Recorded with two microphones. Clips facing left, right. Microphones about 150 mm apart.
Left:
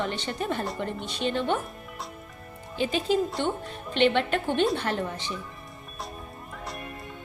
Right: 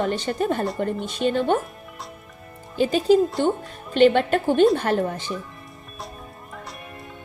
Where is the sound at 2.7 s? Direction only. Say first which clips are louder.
Right 8 dB; 45° right (ahead or behind).